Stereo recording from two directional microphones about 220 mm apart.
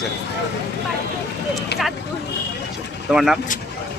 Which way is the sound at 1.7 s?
50° left (ahead or behind).